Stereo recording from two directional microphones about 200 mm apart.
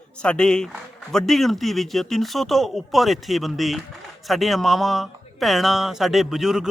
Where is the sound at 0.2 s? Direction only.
5° left (ahead or behind).